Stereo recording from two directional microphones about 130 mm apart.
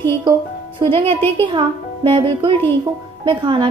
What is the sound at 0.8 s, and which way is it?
Speech, 45° right (ahead or behind).